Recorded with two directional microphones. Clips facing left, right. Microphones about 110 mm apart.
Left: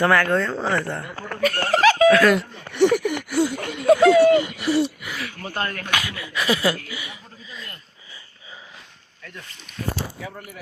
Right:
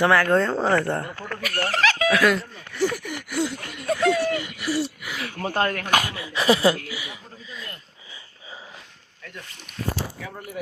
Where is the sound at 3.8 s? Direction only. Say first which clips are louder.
Left 8 dB; 80° left.